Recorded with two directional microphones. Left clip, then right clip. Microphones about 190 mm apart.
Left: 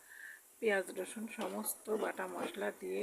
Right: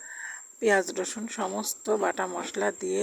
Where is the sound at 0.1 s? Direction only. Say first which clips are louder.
Right 11 dB; 40° right (ahead or behind).